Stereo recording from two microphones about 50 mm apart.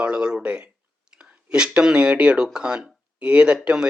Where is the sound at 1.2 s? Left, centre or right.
Centre.